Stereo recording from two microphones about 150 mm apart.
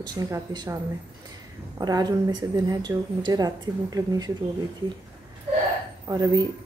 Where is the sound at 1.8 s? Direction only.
25° right (ahead or behind).